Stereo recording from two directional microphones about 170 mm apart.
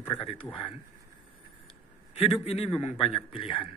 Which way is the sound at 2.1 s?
35° left (ahead or behind).